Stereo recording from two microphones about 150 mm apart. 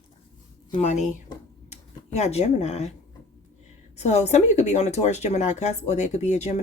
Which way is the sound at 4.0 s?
45° left (ahead or behind).